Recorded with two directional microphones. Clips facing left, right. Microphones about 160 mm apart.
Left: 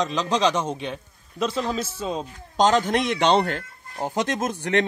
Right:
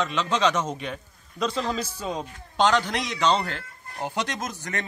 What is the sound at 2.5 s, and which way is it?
Speech, 45° left (ahead or behind).